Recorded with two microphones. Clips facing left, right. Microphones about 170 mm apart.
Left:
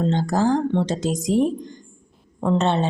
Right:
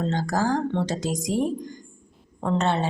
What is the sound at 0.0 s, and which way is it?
A woman's voice, 20° left (ahead or behind).